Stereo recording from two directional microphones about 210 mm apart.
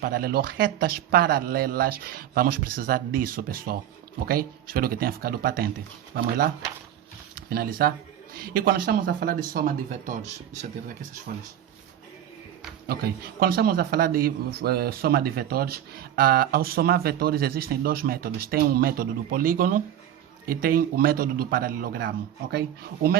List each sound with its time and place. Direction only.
0.0 s a man's voice: 45° right (ahead or behind)
7.5 s a man's voice: 45° right (ahead or behind)
12.9 s a man's voice: 45° right (ahead or behind)